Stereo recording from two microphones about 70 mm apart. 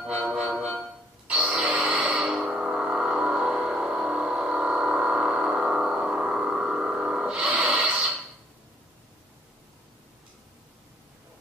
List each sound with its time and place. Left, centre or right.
0.5 s music: centre
2.2 s vehicle: centre